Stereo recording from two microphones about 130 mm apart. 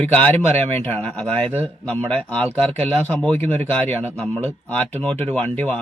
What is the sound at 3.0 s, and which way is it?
Speech, 15° left (ahead or behind).